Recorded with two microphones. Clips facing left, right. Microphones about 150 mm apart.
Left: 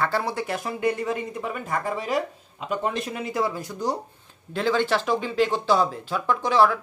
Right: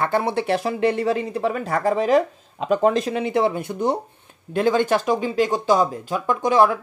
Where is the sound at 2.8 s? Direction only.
90° right.